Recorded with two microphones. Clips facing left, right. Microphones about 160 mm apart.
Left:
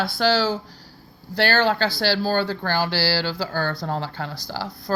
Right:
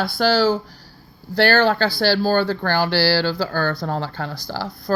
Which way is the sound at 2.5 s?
60° right (ahead or behind).